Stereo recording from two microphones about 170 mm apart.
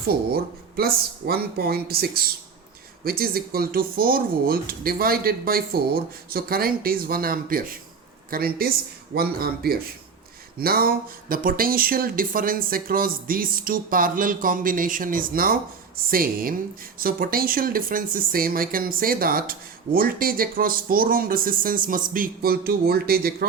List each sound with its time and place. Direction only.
0.1 s speech: 65° right (ahead or behind)